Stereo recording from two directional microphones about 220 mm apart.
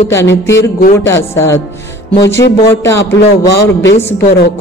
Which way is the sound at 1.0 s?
10° left (ahead or behind).